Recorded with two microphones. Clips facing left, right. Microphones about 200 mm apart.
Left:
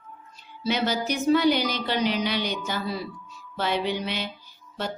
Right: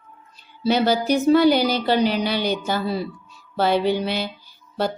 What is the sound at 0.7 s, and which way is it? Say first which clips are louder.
Speech: right 7 dB; 35° right (ahead or behind).